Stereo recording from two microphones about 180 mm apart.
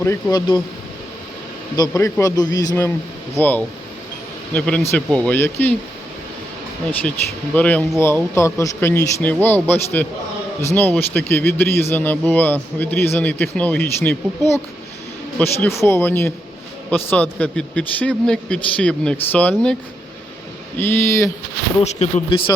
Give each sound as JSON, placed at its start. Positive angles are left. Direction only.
{"t": 0.0, "sound": "speech", "side_deg": 20}
{"t": 1.7, "sound": "a man's voice", "side_deg": 20}
{"t": 7.5, "sound": "a man's voice", "side_deg": 5}
{"t": 20.7, "sound": "a man's voice", "side_deg": 10}
{"t": 21.8, "sound": "speech", "side_deg": 40}